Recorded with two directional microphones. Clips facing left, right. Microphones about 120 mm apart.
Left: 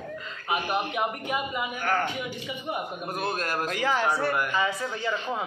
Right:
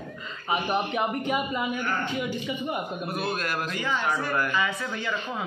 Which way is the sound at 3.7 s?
85° left.